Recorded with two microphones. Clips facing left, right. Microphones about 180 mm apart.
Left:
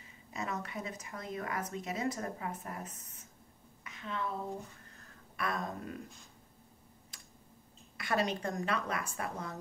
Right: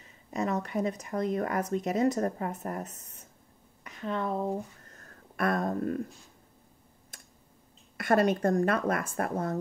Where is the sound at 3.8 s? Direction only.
45° right (ahead or behind).